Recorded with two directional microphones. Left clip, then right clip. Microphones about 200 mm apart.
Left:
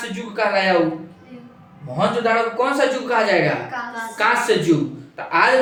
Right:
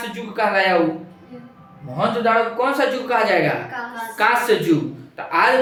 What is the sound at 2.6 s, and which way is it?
Speech, 15° right (ahead or behind).